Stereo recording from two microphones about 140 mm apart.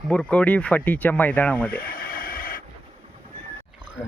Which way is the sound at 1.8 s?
90° left.